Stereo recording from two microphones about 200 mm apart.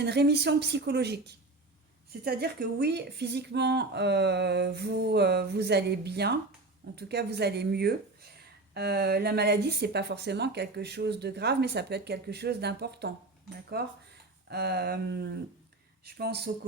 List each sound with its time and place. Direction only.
0.0 s speech: 55° right (ahead or behind)
2.2 s speech: 50° right (ahead or behind)
13.7 s a sound: 50° right (ahead or behind)
16.0 s speech: 55° right (ahead or behind)